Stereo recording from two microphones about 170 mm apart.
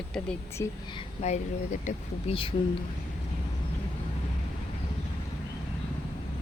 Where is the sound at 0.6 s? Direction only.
20° left (ahead or behind).